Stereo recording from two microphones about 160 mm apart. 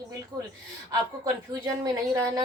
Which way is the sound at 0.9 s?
20° right (ahead or behind).